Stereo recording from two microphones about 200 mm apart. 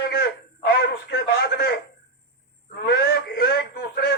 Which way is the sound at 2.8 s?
55° left (ahead or behind).